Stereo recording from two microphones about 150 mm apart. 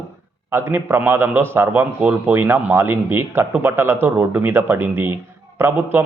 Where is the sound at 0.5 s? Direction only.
15° right (ahead or behind).